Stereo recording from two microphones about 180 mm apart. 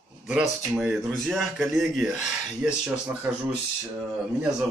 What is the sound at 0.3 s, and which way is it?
A man's voice, 5° right (ahead or behind).